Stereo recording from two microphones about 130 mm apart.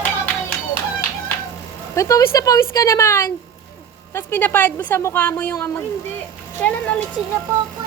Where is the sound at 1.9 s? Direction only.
25° left (ahead or behind).